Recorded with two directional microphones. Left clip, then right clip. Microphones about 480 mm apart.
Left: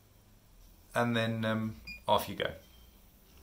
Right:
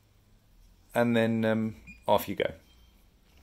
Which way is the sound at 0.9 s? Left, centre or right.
Centre.